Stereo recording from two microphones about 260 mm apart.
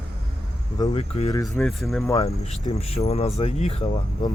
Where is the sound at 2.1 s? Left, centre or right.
Left.